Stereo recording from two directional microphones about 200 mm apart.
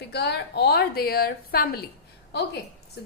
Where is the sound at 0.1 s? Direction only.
55° left (ahead or behind).